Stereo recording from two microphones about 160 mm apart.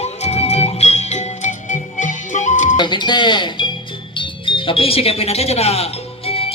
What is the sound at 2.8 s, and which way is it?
Speech, 30° left (ahead or behind).